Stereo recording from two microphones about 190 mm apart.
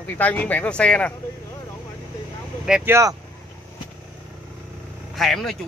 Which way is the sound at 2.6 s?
10° right (ahead or behind).